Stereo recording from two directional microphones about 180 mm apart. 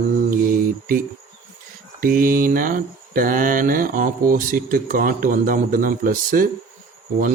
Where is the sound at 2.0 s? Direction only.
50° right (ahead or behind).